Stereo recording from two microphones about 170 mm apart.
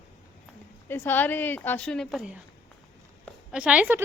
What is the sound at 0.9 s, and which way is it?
A woman's voice, 10° left (ahead or behind).